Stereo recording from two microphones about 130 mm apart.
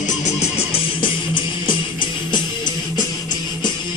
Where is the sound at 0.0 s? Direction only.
65° left (ahead or behind).